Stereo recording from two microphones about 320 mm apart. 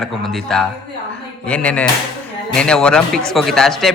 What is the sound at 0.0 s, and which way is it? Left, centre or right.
Speech, centre.